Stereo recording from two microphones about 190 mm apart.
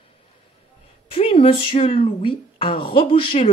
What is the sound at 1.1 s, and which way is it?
Speech, 30° left (ahead or behind).